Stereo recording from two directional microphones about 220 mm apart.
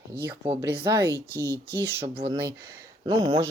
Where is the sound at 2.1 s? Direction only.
25° right (ahead or behind).